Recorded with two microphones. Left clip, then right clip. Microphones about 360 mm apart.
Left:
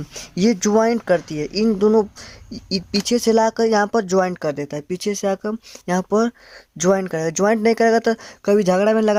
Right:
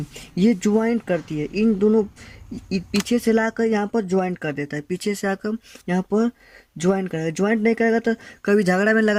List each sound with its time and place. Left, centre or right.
0.2 s speech: centre